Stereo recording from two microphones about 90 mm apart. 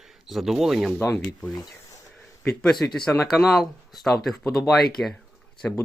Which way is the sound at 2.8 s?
5° left (ahead or behind).